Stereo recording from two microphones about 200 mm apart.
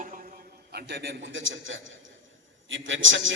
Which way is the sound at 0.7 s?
55° right (ahead or behind).